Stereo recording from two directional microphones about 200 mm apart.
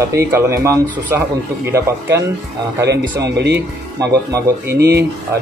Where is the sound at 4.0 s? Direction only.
15° right (ahead or behind).